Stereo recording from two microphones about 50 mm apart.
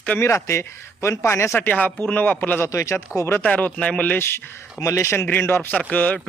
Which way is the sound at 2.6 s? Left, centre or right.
Left.